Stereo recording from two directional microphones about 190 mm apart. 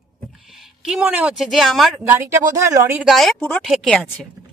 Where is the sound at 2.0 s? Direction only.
15° right (ahead or behind).